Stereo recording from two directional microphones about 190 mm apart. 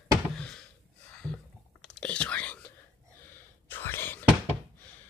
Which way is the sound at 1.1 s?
5° left (ahead or behind).